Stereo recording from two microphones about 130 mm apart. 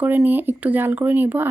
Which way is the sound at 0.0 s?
15° right (ahead or behind).